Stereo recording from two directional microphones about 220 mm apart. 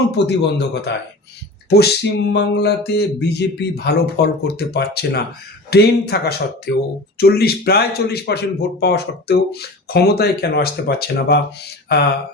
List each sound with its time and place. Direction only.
0.3 s speech: 50° left (ahead or behind)